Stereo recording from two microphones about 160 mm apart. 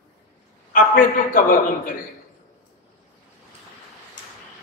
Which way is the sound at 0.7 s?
60° left (ahead or behind).